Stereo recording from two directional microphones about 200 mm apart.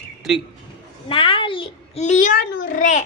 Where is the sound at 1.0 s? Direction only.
25° left (ahead or behind).